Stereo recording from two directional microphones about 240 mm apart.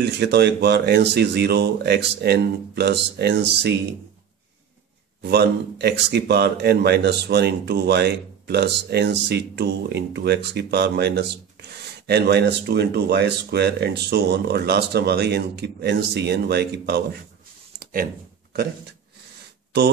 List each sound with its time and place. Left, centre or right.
0.0 s speech: right
5.2 s speech: right